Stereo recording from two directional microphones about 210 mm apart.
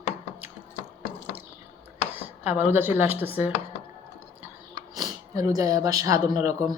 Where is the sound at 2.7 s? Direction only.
10° right (ahead or behind).